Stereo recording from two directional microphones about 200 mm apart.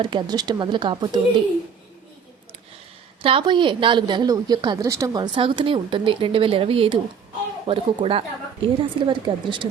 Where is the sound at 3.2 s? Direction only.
25° right (ahead or behind).